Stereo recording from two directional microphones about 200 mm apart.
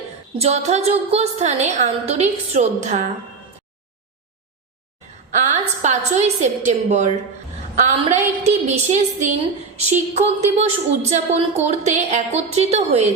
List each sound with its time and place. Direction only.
0.3 s a woman's voice: 30° right (ahead or behind)
5.3 s a woman's voice: 35° right (ahead or behind)